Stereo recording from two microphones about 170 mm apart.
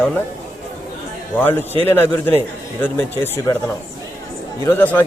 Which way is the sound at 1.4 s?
10° left (ahead or behind).